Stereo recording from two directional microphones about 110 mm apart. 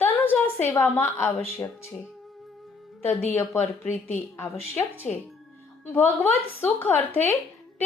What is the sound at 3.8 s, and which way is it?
Speech, 90° left.